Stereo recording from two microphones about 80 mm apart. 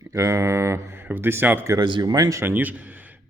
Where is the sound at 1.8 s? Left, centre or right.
Right.